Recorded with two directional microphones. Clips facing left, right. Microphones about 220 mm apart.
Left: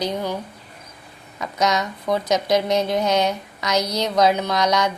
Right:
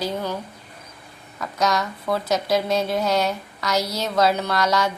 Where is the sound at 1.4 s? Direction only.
20° left (ahead or behind).